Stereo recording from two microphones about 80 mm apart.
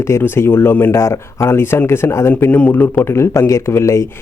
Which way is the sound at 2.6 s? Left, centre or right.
Centre.